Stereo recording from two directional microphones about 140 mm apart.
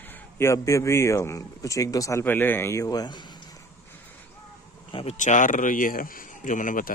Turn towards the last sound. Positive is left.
turn(degrees=70)  # may be behind; listen again after turning